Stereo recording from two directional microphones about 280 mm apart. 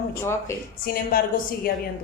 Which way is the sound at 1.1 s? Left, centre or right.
Left.